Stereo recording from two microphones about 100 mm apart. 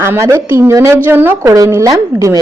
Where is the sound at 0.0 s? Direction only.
30° right (ahead or behind).